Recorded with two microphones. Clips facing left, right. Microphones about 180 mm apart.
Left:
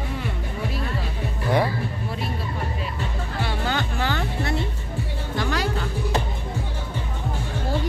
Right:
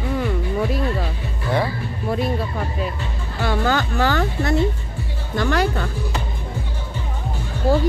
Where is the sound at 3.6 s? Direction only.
40° right (ahead or behind).